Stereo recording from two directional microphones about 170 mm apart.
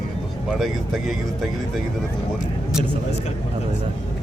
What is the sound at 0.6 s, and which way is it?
Speech, centre (ahead or behind).